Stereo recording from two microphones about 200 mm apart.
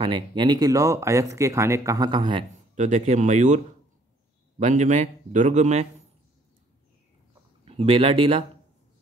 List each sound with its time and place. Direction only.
0.0 s speech: 25° right (ahead or behind)
2.7 s a man's voice: 35° right (ahead or behind)
7.6 s speech: 30° right (ahead or behind)